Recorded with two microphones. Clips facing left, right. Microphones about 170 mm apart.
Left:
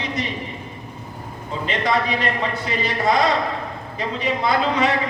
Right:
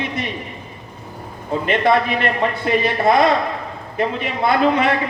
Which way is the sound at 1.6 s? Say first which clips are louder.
Right 5 dB; 55° right (ahead or behind).